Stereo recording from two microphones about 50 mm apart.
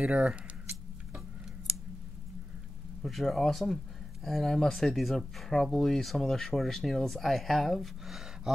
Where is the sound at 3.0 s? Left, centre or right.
Centre.